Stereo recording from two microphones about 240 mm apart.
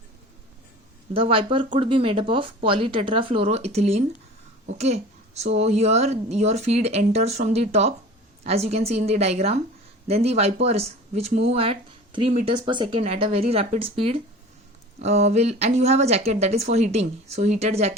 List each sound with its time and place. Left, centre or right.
1.1 s speech: right